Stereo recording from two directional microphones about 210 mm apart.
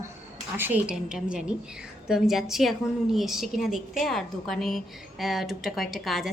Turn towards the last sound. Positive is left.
turn(degrees=0)  # may be behind; listen again after turning